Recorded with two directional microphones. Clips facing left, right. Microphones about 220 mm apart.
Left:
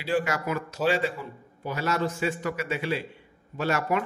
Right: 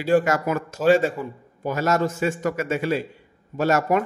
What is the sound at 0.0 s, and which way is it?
A man's voice, 45° right (ahead or behind).